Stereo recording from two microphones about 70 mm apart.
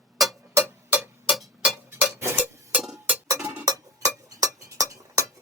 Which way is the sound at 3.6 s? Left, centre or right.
Right.